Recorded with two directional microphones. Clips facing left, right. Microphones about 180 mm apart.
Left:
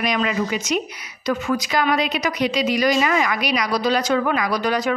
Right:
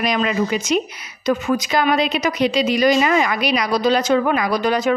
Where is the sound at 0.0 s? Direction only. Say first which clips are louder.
Right 2 dB; 35° right (ahead or behind).